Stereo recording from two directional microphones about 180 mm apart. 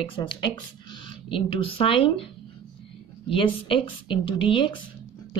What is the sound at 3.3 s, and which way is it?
A woman's voice, 30° left (ahead or behind).